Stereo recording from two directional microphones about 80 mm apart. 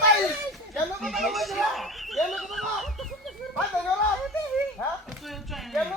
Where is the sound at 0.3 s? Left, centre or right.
Centre.